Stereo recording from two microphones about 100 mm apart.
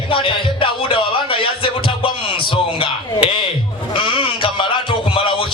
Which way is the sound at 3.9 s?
55° left (ahead or behind).